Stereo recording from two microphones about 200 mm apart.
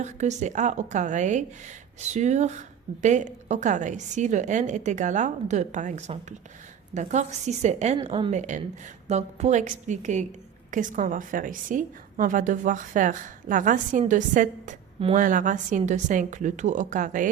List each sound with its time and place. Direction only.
0.0 s a woman's voice: 35° right (ahead or behind)
7.9 s a woman's voice: 25° right (ahead or behind)
8.3 s a woman's voice: 35° right (ahead or behind)